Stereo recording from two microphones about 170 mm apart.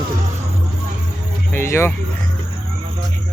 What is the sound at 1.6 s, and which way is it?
Speech, 15° left (ahead or behind).